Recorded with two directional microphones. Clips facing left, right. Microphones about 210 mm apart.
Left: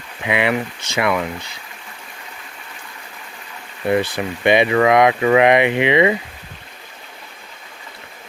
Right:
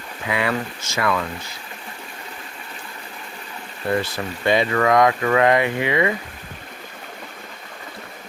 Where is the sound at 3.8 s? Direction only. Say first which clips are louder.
Left 4 dB; 15° left (ahead or behind).